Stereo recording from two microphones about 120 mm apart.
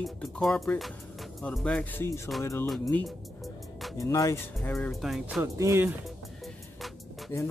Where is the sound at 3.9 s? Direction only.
25° left (ahead or behind).